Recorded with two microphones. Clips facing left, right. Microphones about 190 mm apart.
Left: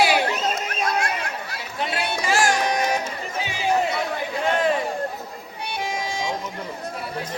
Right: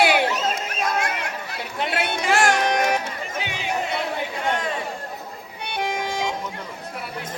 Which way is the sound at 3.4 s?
60° right (ahead or behind).